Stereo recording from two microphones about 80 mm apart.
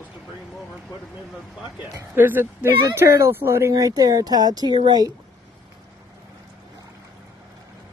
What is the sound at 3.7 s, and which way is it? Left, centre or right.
Speech, right.